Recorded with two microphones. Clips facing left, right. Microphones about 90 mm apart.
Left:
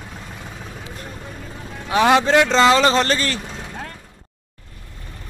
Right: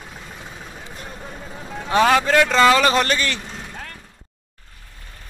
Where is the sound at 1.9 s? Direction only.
15° left (ahead or behind); by 3.9 s 35° left (ahead or behind).